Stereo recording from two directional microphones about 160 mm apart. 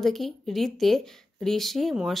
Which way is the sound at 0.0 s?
Centre (ahead or behind).